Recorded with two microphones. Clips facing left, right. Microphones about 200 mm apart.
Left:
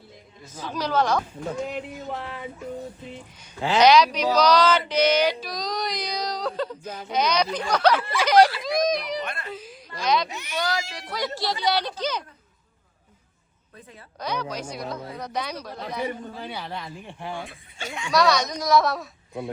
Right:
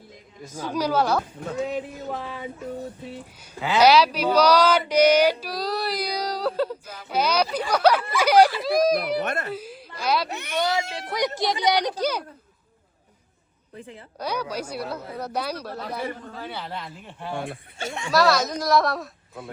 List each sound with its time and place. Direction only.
0.4 s speech: 10° right (ahead or behind)
3.6 s speech: 5° right (ahead or behind)
9.0 s speech: 55° right (ahead or behind)
9.5 s a sound: 10° right (ahead or behind)
10.2 s speech: 60° right (ahead or behind)
10.6 s speech: 25° right (ahead or behind)
14.2 s speech: 10° right (ahead or behind)
16.2 s a man's voice: 15° left (ahead or behind)
17.3 s speech: 60° right (ahead or behind)
18.1 s a woman's voice: centre (ahead or behind)